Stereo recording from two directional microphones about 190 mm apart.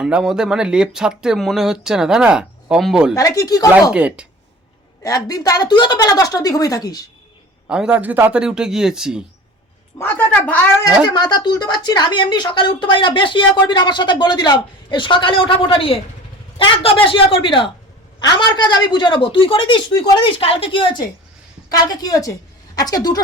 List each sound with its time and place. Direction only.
0.0 s speech: 5° right (ahead or behind)
3.2 s a woman's voice: 20° left (ahead or behind)
3.9 s speech: 5° right (ahead or behind)
5.0 s a woman's voice: 20° left (ahead or behind)
7.7 s speech: 5° right (ahead or behind)
10.0 s speech: 10° left (ahead or behind)
11.0 s a woman's voice: 20° left (ahead or behind)